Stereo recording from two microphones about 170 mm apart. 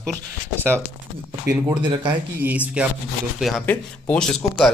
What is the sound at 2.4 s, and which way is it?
A man's voice, 10° right (ahead or behind).